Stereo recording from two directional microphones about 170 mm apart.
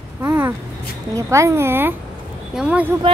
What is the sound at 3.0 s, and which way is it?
Speech, 30° right (ahead or behind).